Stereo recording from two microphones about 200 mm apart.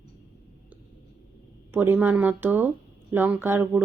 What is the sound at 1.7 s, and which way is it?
Speech, 10° right (ahead or behind).